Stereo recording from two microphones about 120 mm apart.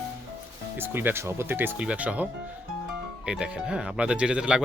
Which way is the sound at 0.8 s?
15° right (ahead or behind).